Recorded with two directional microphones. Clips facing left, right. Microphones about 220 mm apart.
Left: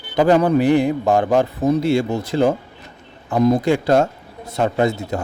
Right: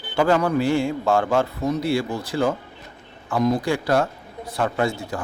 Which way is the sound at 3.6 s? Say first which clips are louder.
Left 5 dB; 20° left (ahead or behind).